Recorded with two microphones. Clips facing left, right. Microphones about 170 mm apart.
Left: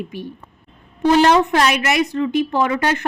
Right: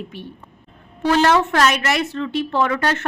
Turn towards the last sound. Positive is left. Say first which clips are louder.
# left 1 dB
turn(degrees=15)  # may be behind; listen again after turning